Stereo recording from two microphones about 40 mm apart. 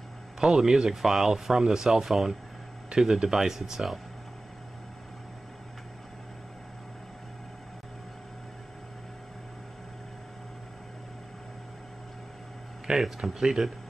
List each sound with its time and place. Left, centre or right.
0.4 s speech: right
1.0 s speech: centre
12.9 s speech: centre